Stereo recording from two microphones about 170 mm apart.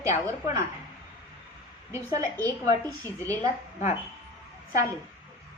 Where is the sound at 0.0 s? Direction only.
20° right (ahead or behind).